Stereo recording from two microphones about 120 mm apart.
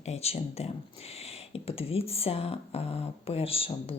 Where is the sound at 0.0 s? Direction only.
60° left (ahead or behind).